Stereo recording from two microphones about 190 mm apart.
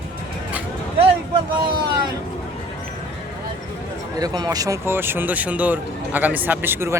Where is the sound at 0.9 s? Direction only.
30° right (ahead or behind).